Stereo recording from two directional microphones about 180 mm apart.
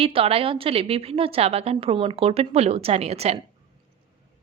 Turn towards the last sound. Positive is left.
turn(degrees=-35)  # may be behind; listen again after turning